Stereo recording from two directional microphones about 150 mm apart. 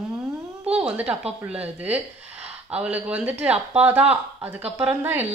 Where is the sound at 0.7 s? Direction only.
10° right (ahead or behind).